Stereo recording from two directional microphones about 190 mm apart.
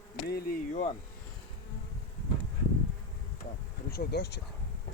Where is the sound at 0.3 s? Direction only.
50° left (ahead or behind).